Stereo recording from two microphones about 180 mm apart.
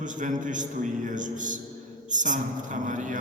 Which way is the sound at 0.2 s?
45° right (ahead or behind).